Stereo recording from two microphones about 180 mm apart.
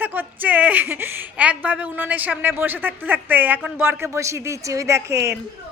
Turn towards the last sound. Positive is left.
turn(degrees=-15)  # may be behind; listen again after turning